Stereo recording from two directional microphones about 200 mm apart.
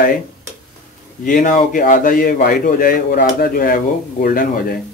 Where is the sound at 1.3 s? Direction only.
40° left (ahead or behind).